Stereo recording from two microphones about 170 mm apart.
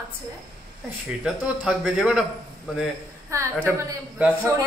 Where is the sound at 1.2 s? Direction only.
5° right (ahead or behind).